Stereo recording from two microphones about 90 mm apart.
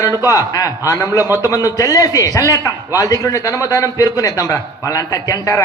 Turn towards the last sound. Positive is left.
turn(degrees=40)  # may be behind; listen again after turning